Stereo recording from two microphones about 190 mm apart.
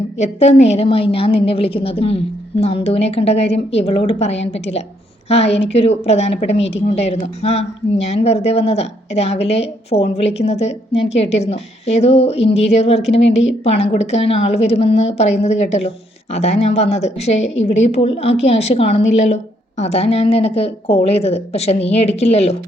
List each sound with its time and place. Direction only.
0.2 s a woman's voice: 35° left (ahead or behind)
5.7 s a woman's voice: 35° left (ahead or behind)